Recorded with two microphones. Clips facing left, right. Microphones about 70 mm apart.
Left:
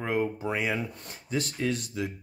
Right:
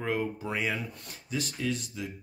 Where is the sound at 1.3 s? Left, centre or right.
Left.